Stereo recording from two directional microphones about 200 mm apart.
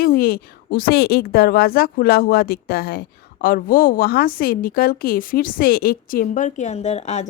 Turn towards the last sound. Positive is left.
turn(degrees=35)  # may be behind; listen again after turning